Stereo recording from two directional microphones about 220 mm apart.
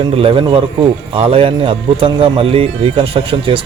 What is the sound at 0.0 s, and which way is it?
A man's voice, 25° right (ahead or behind).